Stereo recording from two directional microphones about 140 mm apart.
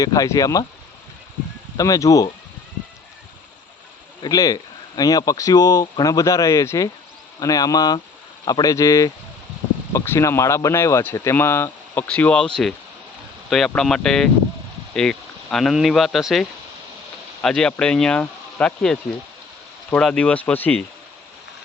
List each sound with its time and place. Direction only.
0.0 s speech: 25° left (ahead or behind)
1.7 s speech: 25° left (ahead or behind)
4.2 s speech: 25° left (ahead or behind); by 12.5 s 10° left (ahead or behind)
13.5 s speech: 5° left (ahead or behind)